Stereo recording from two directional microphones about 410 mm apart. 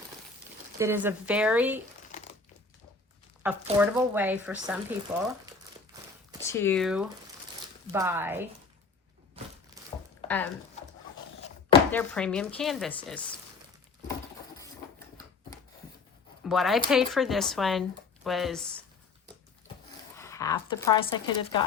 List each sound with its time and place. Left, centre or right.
0.8 s speech: centre
3.4 s speech: centre
6.5 s speech: centre
10.2 s speech: centre
11.9 s speech: centre
16.4 s speech: centre
20.1 s a woman's voice: centre